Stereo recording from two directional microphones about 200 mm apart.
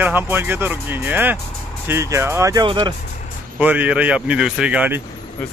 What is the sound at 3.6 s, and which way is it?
Speech, 10° right (ahead or behind).